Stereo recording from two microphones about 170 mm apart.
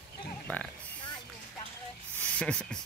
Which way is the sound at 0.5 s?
10° left (ahead or behind).